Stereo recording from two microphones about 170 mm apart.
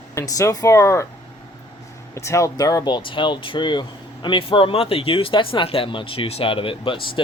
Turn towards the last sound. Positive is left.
turn(degrees=30)  # may be behind; listen again after turning